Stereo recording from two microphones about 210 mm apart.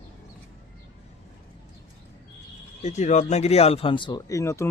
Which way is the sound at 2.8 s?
35° left (ahead or behind).